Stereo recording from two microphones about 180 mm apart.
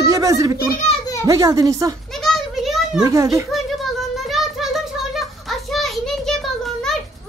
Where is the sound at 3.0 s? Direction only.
15° right (ahead or behind).